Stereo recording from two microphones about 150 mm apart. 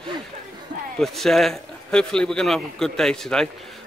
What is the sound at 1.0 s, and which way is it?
A man's voice, centre (ahead or behind).